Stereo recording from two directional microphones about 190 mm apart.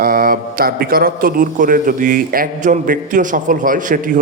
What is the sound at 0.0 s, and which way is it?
A man's voice, 50° right (ahead or behind).